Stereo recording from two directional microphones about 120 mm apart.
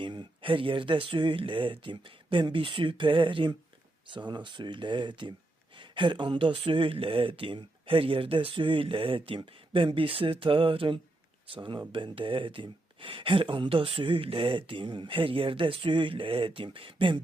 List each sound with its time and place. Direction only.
0.0 s speech: 40° right (ahead or behind)